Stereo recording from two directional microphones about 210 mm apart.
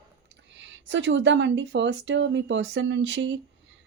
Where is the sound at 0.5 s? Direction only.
60° right (ahead or behind).